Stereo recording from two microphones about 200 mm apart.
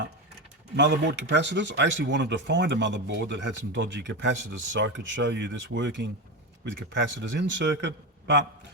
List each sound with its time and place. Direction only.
0.8 s speech: 60° right (ahead or behind)